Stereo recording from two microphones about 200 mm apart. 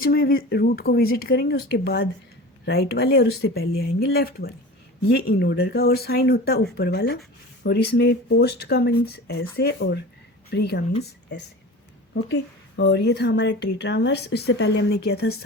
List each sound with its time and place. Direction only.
0.0 s a woman's voice: 50° left (ahead or behind)
12.1 s a woman's voice: 65° left (ahead or behind)